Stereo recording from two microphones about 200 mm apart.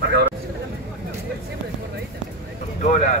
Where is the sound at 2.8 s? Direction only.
35° left (ahead or behind).